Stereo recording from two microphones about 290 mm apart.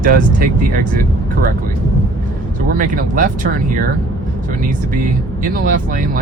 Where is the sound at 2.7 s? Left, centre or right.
Right.